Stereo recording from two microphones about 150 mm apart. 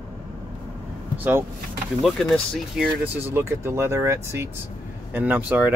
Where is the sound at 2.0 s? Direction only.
5° left (ahead or behind).